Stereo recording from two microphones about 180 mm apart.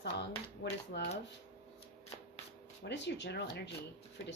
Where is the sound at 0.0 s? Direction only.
70° left (ahead or behind).